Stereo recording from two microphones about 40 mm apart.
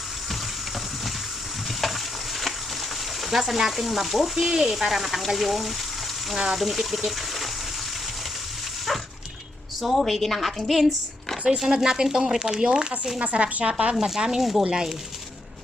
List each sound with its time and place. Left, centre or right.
3.2 s speech: centre
8.9 s dog: centre
9.8 s speech: centre
11.4 s speech: centre
14.3 s speech: centre